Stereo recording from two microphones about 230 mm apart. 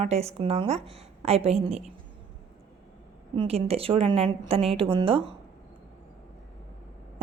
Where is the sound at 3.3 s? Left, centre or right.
Right.